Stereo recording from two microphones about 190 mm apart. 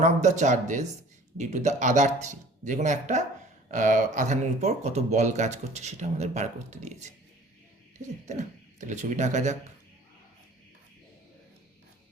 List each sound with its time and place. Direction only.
0.0 s speech: 40° right (ahead or behind)
8.4 s speech: 40° right (ahead or behind)